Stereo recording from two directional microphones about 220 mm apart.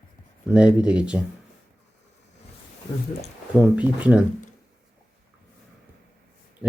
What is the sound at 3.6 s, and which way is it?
Speech, 5° right (ahead or behind).